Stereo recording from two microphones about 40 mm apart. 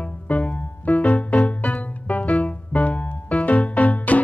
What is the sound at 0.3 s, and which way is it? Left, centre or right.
Music, left.